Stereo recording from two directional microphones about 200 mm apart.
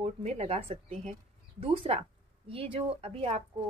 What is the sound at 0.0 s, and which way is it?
Speech, 30° right (ahead or behind).